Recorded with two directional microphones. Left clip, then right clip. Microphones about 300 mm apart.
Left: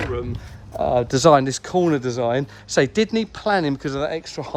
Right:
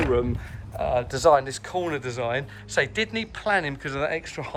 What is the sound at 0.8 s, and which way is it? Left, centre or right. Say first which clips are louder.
Speech: left 5 dB; centre.